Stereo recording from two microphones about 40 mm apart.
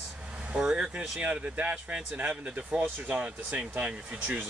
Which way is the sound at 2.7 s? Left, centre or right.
Right.